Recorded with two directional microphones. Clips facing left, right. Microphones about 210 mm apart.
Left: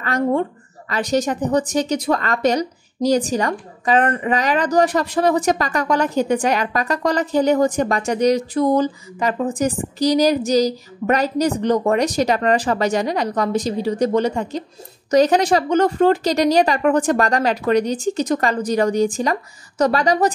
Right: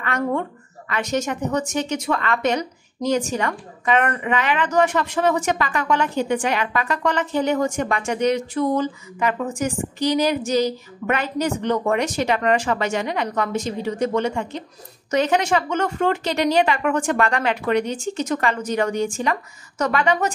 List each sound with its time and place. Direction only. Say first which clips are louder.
0.0 s speech: left 4 dB; 35° left (ahead or behind)